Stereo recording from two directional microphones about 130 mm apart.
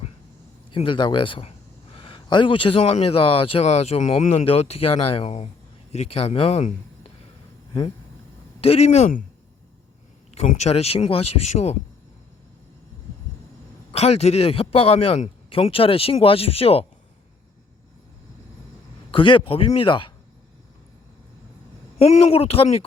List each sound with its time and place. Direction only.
0.8 s speech: 40° left (ahead or behind)
4.2 s speech: 65° left (ahead or behind)
4.4 s a man's voice: 50° left (ahead or behind)
8.6 s speech: 55° left (ahead or behind); by 9.2 s 75° left (ahead or behind)
10.3 s speech: 65° left (ahead or behind)
13.9 s a man's voice: 55° left (ahead or behind)
19.1 s speech: 40° left (ahead or behind)
21.9 s a man's voice: 50° left (ahead or behind)